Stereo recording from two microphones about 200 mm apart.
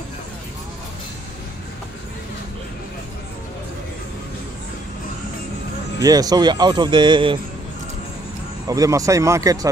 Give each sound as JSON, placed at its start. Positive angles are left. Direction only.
{"t": 5.9, "sound": "speech", "side_deg": -20}
{"t": 8.6, "sound": "speech", "side_deg": -15}